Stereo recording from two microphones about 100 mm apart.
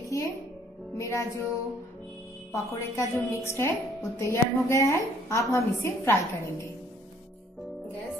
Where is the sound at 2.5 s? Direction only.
30° left (ahead or behind).